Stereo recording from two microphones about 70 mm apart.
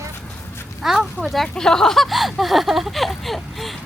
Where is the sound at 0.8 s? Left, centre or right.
Centre.